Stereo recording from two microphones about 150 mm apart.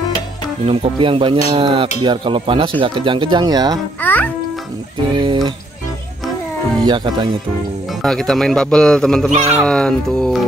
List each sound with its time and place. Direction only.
0.7 s speech: 35° right (ahead or behind)
4.0 s a child's voice: 10° left (ahead or behind)
5.1 s speech: 35° right (ahead or behind)
6.8 s speech: 30° right (ahead or behind)
8.0 s a man's voice: centre (ahead or behind)